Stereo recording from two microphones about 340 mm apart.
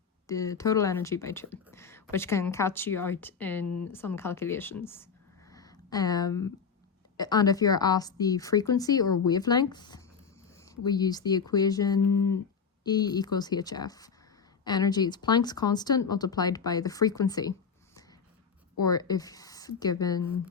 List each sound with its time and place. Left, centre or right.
0.3 s speech: centre
3.7 s speech: left
3.9 s speech: centre
5.5 s a sound: centre
7.2 s speech: centre
18.8 s speech: centre